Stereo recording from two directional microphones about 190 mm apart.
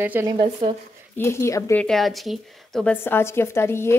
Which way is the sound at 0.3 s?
30° right (ahead or behind).